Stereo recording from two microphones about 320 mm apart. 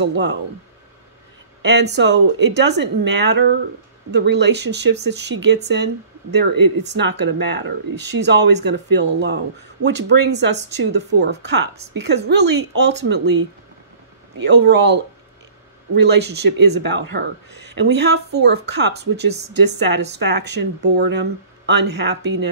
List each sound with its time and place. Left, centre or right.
0.0 s speech: right
1.6 s speech: right